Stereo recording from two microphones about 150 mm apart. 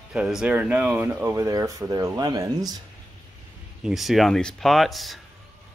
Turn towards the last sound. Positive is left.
turn(degrees=0)  # may be behind; listen again after turning